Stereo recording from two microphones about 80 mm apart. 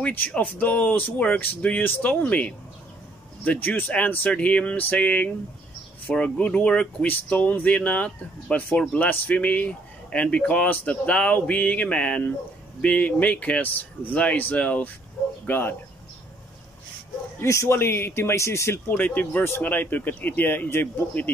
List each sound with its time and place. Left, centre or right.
0.0 s speech: centre
17.4 s speech: left
18.9 s speech: left